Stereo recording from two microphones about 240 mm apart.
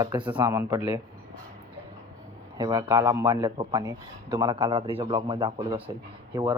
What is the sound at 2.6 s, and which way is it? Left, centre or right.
A man's voice, centre.